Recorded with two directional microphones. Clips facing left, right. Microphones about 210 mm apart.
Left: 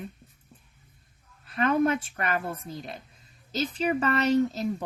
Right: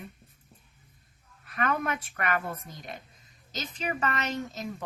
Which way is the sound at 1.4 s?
30° left (ahead or behind).